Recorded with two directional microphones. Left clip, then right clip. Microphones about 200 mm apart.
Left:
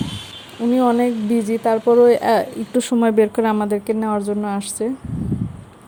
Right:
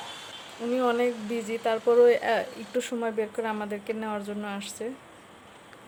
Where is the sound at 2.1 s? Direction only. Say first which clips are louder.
Left 9 dB; 30° left (ahead or behind).